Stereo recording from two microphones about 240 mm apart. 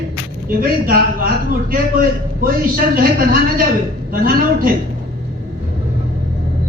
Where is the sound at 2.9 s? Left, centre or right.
Right.